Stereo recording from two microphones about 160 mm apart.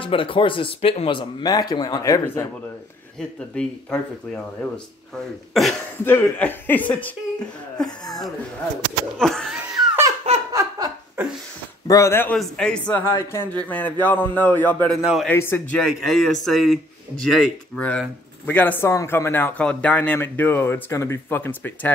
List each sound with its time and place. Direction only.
0.0 s speech: 35° left (ahead or behind)
3.2 s speech: 5° left (ahead or behind)
6.0 s speech: 10° left (ahead or behind)
9.2 s speech: 5° left (ahead or behind)
10.5 s laughter: 20° right (ahead or behind)
11.9 s speech: 15° left (ahead or behind)
15.0 s speech: 5° right (ahead or behind)
15.2 s speech: 15° left (ahead or behind)
15.8 s speech: centre (ahead or behind)